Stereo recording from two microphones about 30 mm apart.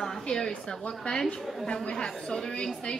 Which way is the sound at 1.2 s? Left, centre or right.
Centre.